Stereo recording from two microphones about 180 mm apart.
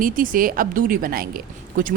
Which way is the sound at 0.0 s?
50° right (ahead or behind).